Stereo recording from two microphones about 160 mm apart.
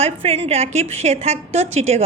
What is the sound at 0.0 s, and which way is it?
A woman's voice, 40° right (ahead or behind).